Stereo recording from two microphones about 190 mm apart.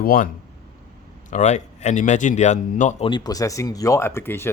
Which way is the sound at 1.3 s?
40° left (ahead or behind).